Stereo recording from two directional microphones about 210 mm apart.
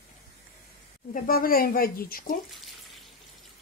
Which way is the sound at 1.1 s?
45° left (ahead or behind).